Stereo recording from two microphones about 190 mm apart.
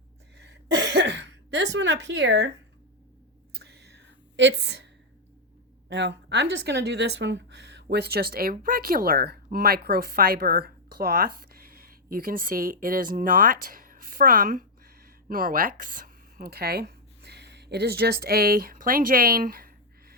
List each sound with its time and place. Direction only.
0.3 s throat clearing: 65° right (ahead or behind)
3.5 s whispering: 60° right (ahead or behind)
5.9 s speech: 65° right (ahead or behind); by 20.1 s 50° right (ahead or behind)